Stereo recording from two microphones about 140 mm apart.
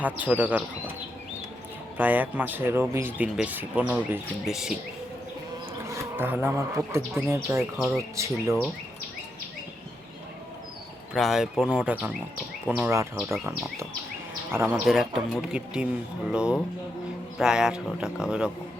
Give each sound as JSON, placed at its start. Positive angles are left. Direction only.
{"t": 0.0, "sound": "speech", "side_deg": -10}
{"t": 2.0, "sound": "speech", "side_deg": -10}
{"t": 5.9, "sound": "speech", "side_deg": -15}
{"t": 11.1, "sound": "speech", "side_deg": 0}
{"t": 14.5, "sound": "speech", "side_deg": -15}
{"t": 14.8, "sound": "speech", "side_deg": 0}